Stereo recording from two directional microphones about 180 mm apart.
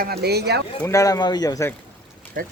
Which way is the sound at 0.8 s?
15° left (ahead or behind).